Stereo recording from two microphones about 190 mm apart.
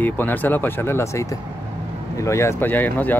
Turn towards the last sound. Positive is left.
turn(degrees=10)  # may be behind; listen again after turning